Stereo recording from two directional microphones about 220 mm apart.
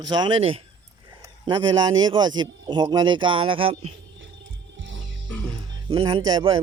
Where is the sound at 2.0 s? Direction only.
20° right (ahead or behind).